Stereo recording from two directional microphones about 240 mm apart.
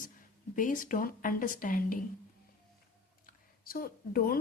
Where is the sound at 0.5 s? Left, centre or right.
Left.